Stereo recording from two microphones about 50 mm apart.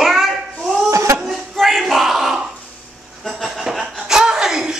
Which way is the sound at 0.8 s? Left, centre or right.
Right.